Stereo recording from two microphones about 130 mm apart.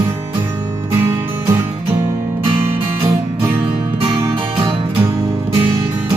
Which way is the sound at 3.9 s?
45° right (ahead or behind).